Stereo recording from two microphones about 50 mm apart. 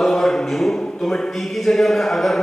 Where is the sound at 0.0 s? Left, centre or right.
Centre.